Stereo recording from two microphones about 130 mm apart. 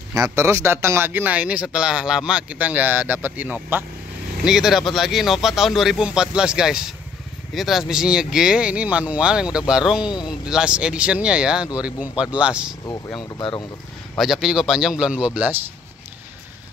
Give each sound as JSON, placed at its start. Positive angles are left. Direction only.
{"t": 0.1, "sound": "speech", "side_deg": -25}
{"t": 13.2, "sound": "speech", "side_deg": 35}
{"t": 14.1, "sound": "speech", "side_deg": 0}